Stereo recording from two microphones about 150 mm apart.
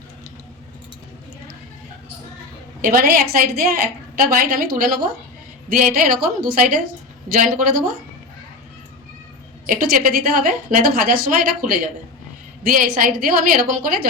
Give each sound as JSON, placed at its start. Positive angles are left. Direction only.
{"t": 2.8, "sound": "a woman's voice", "side_deg": -75}
{"t": 9.6, "sound": "a woman's voice", "side_deg": -75}